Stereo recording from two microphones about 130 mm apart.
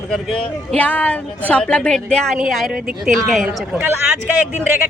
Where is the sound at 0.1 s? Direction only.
5° left (ahead or behind).